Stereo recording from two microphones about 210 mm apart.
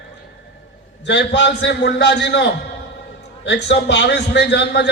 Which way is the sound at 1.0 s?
55° left (ahead or behind).